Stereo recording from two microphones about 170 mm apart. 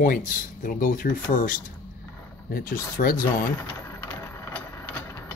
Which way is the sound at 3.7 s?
10° left (ahead or behind).